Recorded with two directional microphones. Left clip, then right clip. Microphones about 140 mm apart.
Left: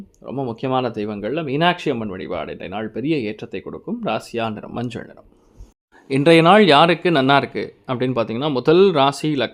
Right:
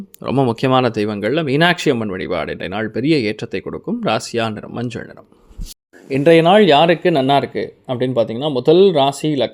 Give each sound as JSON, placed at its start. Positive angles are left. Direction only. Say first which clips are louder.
{"t": 0.2, "sound": "speech", "louder": "right 10 dB", "side_deg": -70}
{"t": 0.4, "sound": "speech", "louder": "right 5 dB", "side_deg": -35}
{"t": 6.1, "sound": "speech", "louder": "right 1 dB", "side_deg": 5}